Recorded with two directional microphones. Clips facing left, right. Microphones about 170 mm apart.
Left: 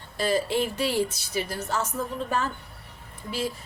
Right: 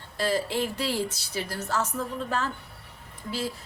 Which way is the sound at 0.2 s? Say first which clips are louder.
Left 2 dB; 15° left (ahead or behind).